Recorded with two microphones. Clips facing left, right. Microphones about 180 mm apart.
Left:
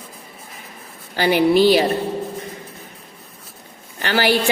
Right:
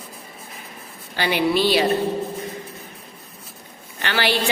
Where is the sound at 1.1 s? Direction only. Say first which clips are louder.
Left 5 dB; 45° left (ahead or behind).